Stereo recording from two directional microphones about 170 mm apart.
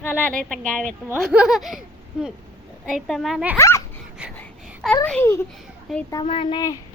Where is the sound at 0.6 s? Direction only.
50° right (ahead or behind).